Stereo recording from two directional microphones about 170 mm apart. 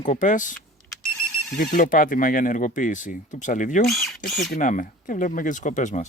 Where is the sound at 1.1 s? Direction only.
5° left (ahead or behind).